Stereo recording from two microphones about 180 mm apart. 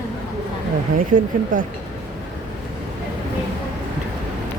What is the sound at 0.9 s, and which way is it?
Speech, 50° right (ahead or behind).